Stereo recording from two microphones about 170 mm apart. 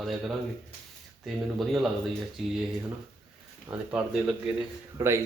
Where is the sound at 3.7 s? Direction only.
25° right (ahead or behind).